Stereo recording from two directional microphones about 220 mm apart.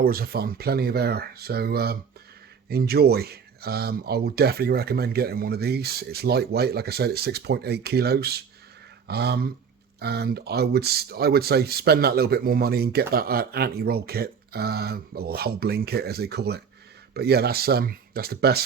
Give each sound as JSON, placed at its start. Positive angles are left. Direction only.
{"t": 0.0, "sound": "speech", "side_deg": -45}